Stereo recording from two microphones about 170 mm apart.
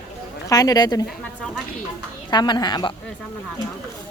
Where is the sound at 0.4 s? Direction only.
20° left (ahead or behind).